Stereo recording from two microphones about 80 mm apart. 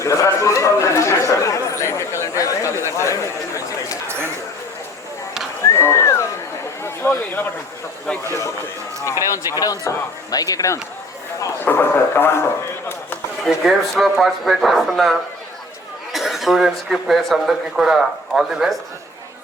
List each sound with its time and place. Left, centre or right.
0.0 s chatter: left
5.6 s a sound: left
9.3 s speech: left
11.6 s speech: left
13.4 s speech: centre
16.1 s speech: centre